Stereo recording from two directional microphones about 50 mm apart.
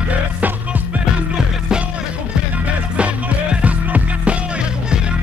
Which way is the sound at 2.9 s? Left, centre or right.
Right.